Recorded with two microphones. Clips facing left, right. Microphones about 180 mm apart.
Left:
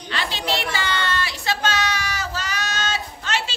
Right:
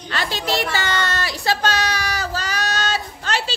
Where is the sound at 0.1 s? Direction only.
45° right (ahead or behind).